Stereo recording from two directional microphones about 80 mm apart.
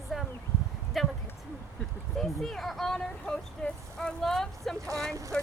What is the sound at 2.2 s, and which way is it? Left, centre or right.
Speech, centre.